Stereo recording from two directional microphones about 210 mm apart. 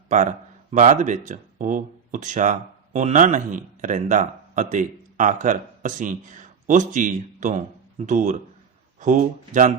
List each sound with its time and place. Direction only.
0.1 s speech: 35° right (ahead or behind)